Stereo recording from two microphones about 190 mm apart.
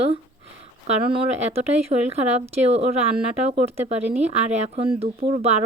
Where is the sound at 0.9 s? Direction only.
30° right (ahead or behind).